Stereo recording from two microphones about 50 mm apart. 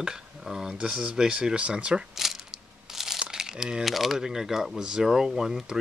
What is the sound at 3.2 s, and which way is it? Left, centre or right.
Crumpling, centre.